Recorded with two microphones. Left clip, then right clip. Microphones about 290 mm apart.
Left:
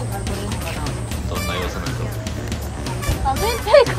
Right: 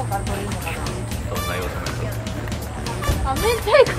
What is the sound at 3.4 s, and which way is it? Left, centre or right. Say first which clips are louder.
Speech: left 3 dB; left.